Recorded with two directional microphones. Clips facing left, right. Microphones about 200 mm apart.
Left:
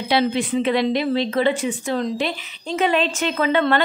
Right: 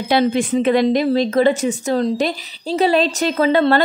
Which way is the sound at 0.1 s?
45° right (ahead or behind).